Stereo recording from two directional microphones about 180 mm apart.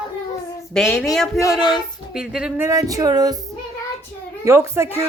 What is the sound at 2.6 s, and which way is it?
Music, 20° right (ahead or behind).